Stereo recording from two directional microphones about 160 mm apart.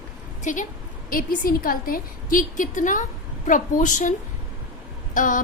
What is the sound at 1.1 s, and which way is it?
A woman's voice, 60° left (ahead or behind).